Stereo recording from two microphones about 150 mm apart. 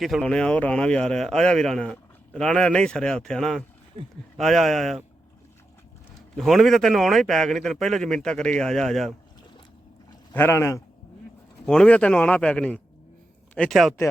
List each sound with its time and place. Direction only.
0.0 s speech: centre (ahead or behind)
6.3 s speech: centre (ahead or behind)
10.3 s a man's voice: 15° left (ahead or behind)
11.6 s a man's voice: 5° left (ahead or behind)